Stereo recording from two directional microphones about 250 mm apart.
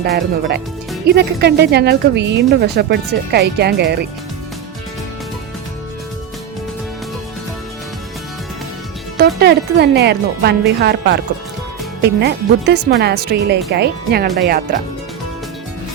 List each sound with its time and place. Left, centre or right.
1.0 s a woman's voice: right
9.1 s a woman's voice: right